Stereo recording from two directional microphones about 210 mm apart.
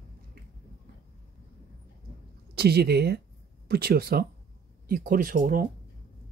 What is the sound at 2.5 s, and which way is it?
Speech, 50° right (ahead or behind).